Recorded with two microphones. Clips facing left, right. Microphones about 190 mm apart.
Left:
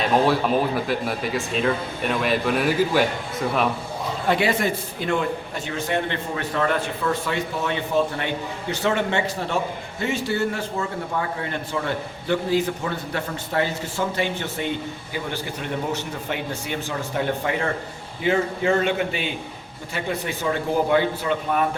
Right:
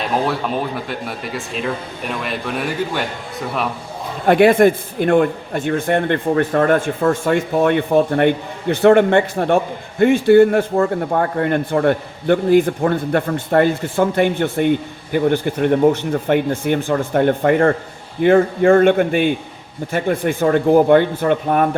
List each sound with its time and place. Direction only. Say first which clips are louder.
0.9 s speech: left 2 dB; centre (ahead or behind)
4.3 s a man's voice: right 11 dB; 55° right (ahead or behind)